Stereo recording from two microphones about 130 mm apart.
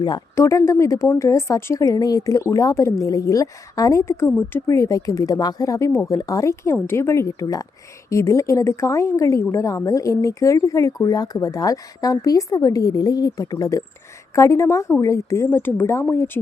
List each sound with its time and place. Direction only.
0.3 s a woman's voice: 20° left (ahead or behind)
4.6 s a woman's voice: 25° left (ahead or behind)